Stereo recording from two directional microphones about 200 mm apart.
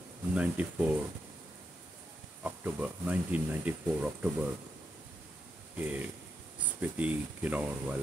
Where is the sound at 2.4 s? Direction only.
10° right (ahead or behind).